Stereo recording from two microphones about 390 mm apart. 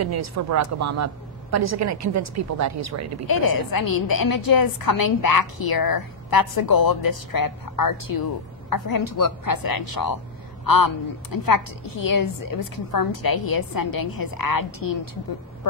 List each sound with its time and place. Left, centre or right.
0.0 s a woman's voice: right
3.3 s a woman's voice: left